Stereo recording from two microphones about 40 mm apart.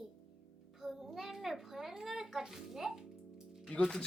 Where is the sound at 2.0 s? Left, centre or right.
Centre.